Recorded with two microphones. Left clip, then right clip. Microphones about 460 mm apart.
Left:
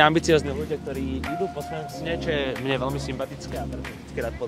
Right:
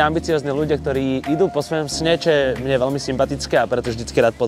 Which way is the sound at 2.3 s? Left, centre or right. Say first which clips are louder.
Right 10 dB; right.